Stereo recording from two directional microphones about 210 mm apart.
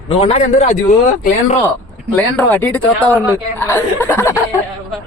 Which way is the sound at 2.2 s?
10° left (ahead or behind).